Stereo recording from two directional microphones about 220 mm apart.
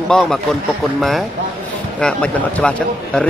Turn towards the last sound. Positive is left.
turn(degrees=5)  # may be behind; listen again after turning